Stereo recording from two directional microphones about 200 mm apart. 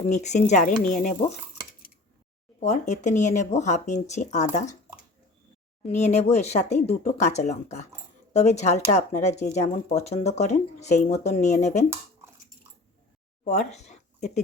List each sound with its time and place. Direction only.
0.1 s speech: 35° left (ahead or behind)
2.6 s speech: 35° left (ahead or behind)
5.8 s speech: 35° left (ahead or behind)
13.4 s speech: 35° left (ahead or behind)